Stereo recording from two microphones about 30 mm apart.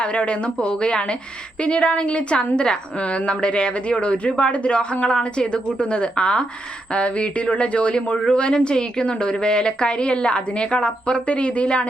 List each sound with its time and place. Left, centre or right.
0.0 s a woman's voice: left
6.9 s a woman's voice: left